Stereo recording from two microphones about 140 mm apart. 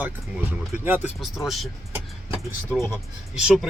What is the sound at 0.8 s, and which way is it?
Speech, 15° right (ahead or behind).